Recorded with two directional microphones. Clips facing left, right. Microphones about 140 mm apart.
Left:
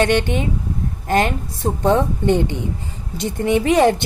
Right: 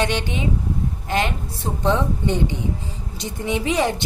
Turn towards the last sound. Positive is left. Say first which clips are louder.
# left 7 dB
turn(degrees=55)  # may be behind; listen again after turning